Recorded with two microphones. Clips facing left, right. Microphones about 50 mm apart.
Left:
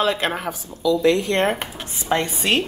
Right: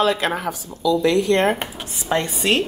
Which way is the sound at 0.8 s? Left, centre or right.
Left.